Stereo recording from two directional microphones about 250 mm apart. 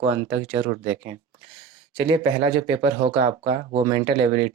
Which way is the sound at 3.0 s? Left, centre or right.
Right.